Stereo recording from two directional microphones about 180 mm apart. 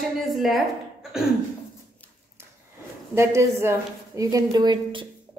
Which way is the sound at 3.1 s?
15° right (ahead or behind).